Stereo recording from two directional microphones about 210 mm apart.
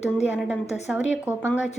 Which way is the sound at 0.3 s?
Centre (ahead or behind).